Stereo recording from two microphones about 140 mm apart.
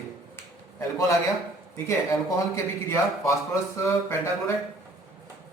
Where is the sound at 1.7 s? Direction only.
20° left (ahead or behind).